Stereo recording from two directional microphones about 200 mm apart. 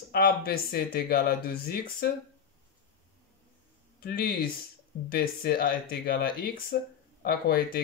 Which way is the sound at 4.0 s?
50° left (ahead or behind).